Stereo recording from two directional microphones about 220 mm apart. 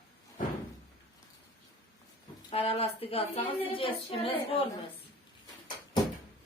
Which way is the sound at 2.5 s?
25° left (ahead or behind).